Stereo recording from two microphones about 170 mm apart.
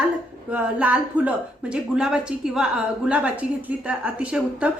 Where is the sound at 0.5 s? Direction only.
10° right (ahead or behind).